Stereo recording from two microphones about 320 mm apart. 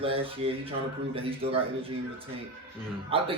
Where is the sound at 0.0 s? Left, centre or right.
Centre.